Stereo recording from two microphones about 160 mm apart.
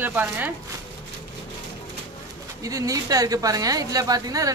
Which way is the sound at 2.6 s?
20° right (ahead or behind).